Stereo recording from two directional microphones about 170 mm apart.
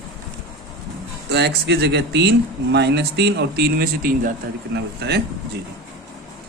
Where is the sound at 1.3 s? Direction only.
75° right (ahead or behind); by 4.3 s 60° right (ahead or behind).